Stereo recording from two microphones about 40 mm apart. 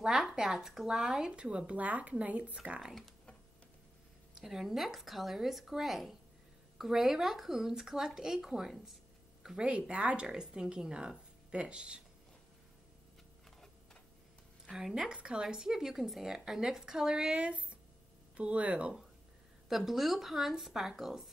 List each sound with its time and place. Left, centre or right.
0.1 s a sound: right
0.4 s speech: centre
1.3 s speech: right
1.8 s speech: right
4.4 s speech: centre
9.6 s speech: right
10.2 s speech: centre
15.0 s speech: right
15.4 s speech: centre
17.4 s speech: right
19.7 s speech: centre